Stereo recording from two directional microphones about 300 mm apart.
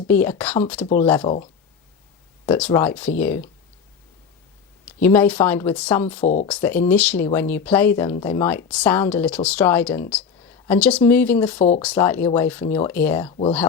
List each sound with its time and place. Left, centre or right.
0.1 s speech: centre
2.5 s speech: centre
4.9 s speech: centre
6.2 s speech: left
6.5 s speech: centre